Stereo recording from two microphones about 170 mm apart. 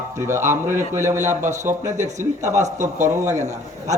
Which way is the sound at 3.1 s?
15° right (ahead or behind).